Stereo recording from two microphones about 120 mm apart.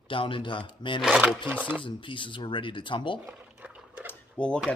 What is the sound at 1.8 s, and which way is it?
Speech, 45° left (ahead or behind).